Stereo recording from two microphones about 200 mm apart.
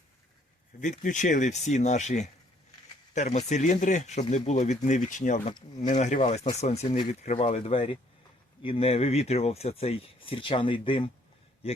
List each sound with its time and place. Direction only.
0.8 s speech: 40° left (ahead or behind)
6.8 s speech: 20° left (ahead or behind)
7.1 s speech: 35° left (ahead or behind)